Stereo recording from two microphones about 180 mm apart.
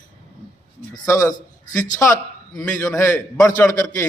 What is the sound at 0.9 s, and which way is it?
Speech, 15° left (ahead or behind).